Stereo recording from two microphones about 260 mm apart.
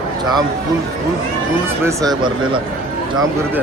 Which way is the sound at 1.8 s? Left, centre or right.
Centre.